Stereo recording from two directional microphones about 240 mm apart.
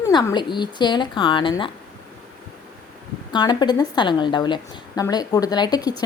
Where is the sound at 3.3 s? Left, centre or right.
Centre.